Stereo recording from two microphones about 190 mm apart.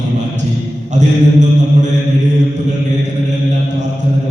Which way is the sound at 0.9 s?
40° right (ahead or behind).